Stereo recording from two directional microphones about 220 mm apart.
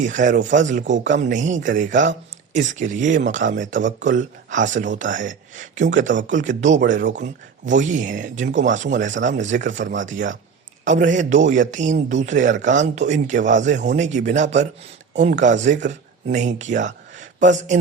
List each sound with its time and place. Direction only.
0.0 s speech: 35° right (ahead or behind)